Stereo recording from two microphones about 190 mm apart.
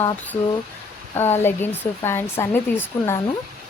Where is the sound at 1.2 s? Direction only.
10° left (ahead or behind).